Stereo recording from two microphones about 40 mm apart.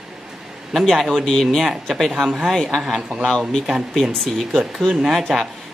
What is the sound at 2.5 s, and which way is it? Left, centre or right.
Speech, centre.